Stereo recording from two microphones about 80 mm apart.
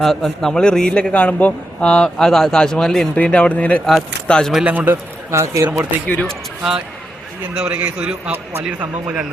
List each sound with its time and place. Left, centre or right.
0.0 s a man's voice: centre
4.5 s a man's voice: centre
4.9 s speech: right
5.6 s a man's voice: centre